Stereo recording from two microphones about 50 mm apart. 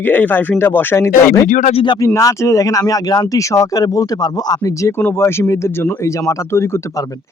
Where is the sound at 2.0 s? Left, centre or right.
Left.